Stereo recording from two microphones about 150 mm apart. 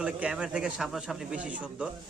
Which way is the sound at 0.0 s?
5° right (ahead or behind).